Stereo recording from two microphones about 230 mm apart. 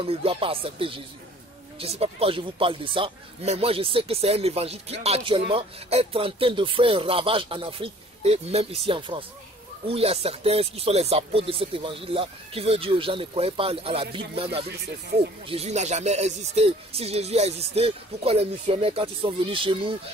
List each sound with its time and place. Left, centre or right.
0.0 s speech: right
15.1 s speech: right
15.4 s speech: right